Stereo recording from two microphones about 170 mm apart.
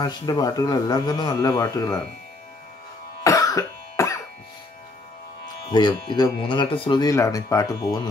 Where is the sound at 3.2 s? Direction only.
20° left (ahead or behind).